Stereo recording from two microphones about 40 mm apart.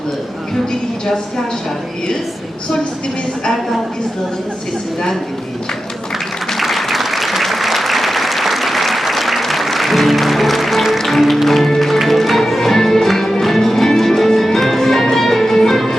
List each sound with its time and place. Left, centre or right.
0.7 s speech: centre
6.6 s applause: centre